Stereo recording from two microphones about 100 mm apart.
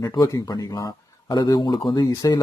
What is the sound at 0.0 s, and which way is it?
Speech, 35° left (ahead or behind).